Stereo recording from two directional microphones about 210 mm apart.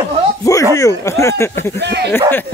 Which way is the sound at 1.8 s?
55° right (ahead or behind).